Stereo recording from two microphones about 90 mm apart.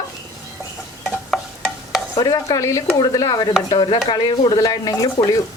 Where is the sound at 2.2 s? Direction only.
45° left (ahead or behind).